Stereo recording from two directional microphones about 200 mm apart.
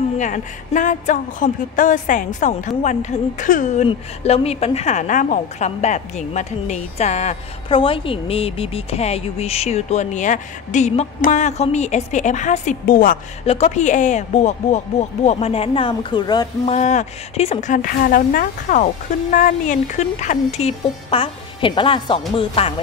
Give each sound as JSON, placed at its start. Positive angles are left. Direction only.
{"t": 0.2, "sound": "a woman's voice", "side_deg": 40}
{"t": 13.5, "sound": "a woman's voice", "side_deg": 35}
{"t": 16.7, "sound": "a woman's voice", "side_deg": 35}
{"t": 22.3, "sound": "music", "side_deg": 30}